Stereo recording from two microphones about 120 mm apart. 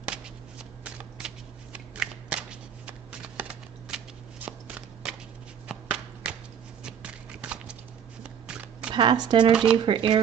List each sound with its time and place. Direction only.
0.8 s shuffling cards: 10° right (ahead or behind)
6.8 s a sound: 10° right (ahead or behind)
8.2 s shuffling cards: 10° right (ahead or behind)
8.9 s speech: 40° right (ahead or behind)
9.5 s speech: 5° right (ahead or behind)
9.8 s speech: 45° right (ahead or behind)